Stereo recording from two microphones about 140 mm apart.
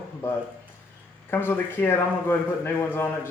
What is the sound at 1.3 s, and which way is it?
Speech, 15° left (ahead or behind).